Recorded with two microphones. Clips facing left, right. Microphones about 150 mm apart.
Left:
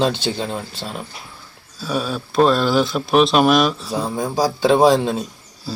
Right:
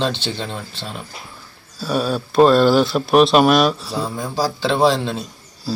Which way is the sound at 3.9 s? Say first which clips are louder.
Left 2 dB; 15° left (ahead or behind).